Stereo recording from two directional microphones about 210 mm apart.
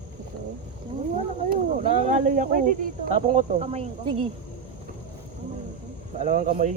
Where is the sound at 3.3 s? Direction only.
35° right (ahead or behind).